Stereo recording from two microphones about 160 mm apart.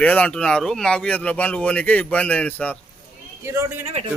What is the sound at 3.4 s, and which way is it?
Speech, 15° right (ahead or behind).